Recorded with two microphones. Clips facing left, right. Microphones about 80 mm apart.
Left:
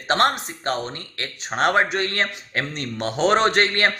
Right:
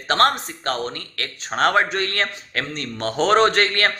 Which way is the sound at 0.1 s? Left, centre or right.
Left.